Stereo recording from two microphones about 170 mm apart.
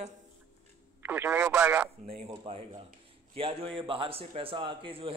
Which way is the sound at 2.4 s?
35° right (ahead or behind).